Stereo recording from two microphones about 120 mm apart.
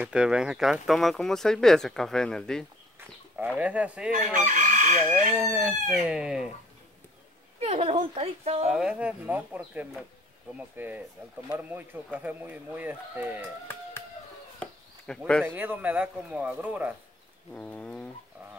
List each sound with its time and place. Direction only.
0.0 s speech: 10° right (ahead or behind)
3.4 s speech: 10° right (ahead or behind)
4.5 s chicken: 90° right
5.5 s speech: 5° right (ahead or behind)
7.6 s speech: 55° right (ahead or behind)
8.6 s speech: 10° right (ahead or behind)
14.6 s a sound: 5° left (ahead or behind)
15.4 s speech: 15° right (ahead or behind)
17.6 s bird: 10° left (ahead or behind)